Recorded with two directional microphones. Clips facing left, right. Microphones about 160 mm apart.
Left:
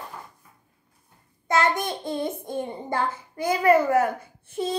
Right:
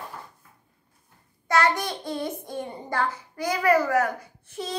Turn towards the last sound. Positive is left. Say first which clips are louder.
# left 5 dB
turn(degrees=25)  # may be behind; listen again after turning